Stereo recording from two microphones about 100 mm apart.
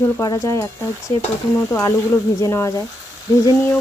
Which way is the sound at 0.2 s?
35° left (ahead or behind).